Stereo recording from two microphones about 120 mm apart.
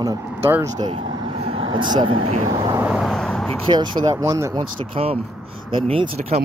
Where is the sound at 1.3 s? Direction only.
50° right (ahead or behind).